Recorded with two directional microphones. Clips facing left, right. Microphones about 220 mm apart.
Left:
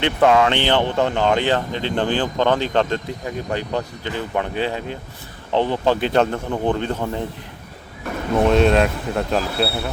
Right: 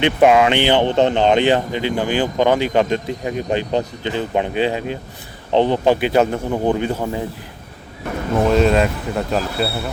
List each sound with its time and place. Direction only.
0.0 s speech: 15° right (ahead or behind)
8.4 s speech: centre (ahead or behind)